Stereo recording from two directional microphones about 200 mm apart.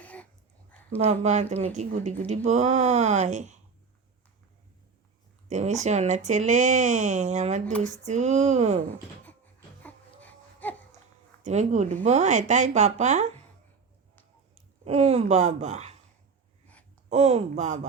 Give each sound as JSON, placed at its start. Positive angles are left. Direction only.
{"t": 0.0, "sound": "dog", "side_deg": 5}
{"t": 0.9, "sound": "speech", "side_deg": -35}
{"t": 5.5, "sound": "speech", "side_deg": -35}
{"t": 9.8, "sound": "baby cry", "side_deg": 10}
{"t": 11.4, "sound": "speech", "side_deg": -35}
{"t": 14.5, "sound": "speech", "side_deg": -35}
{"t": 17.1, "sound": "speech", "side_deg": -35}